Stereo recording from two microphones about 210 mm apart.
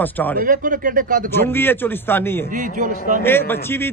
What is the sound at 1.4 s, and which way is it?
A man's voice, 10° left (ahead or behind).